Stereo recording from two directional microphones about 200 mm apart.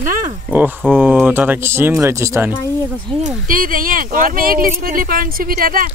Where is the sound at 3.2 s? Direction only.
45° right (ahead or behind).